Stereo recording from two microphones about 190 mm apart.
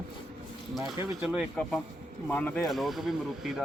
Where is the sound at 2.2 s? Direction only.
10° left (ahead or behind).